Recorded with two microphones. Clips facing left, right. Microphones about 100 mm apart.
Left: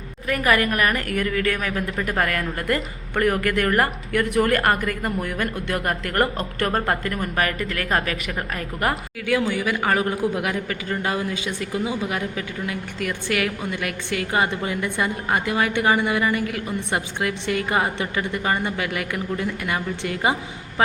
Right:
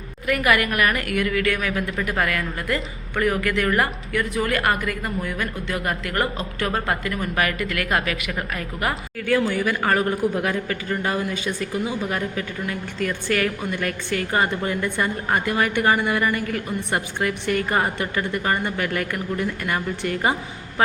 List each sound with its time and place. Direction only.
0.3 s a woman's voice: 30° left (ahead or behind)
9.6 s a man's voice: 15° left (ahead or behind)